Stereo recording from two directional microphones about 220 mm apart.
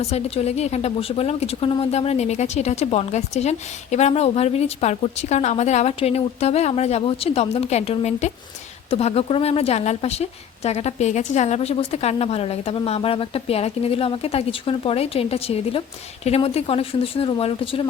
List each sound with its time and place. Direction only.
0.0 s a woman's voice: 30° left (ahead or behind)